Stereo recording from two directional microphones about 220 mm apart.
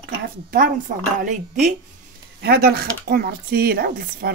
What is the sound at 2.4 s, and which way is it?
Speech, 45° right (ahead or behind).